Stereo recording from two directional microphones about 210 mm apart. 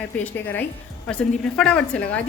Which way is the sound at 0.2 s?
10° left (ahead or behind).